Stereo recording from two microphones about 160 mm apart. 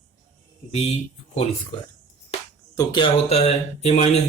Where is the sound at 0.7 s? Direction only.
40° left (ahead or behind).